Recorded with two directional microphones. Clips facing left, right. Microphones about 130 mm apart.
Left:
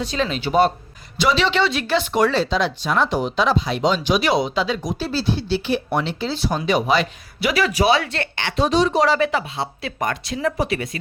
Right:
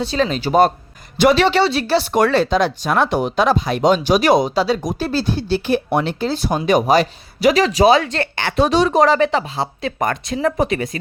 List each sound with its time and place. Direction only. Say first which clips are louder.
0.0 s speech: right 4 dB; 35° right (ahead or behind)
1.6 s speech: right 3 dB; 35° right (ahead or behind)
2.1 s speech: right 4 dB; 55° right (ahead or behind); by 10.8 s 40° right (ahead or behind)